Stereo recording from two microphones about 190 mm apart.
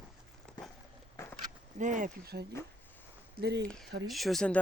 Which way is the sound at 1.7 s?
40° right (ahead or behind).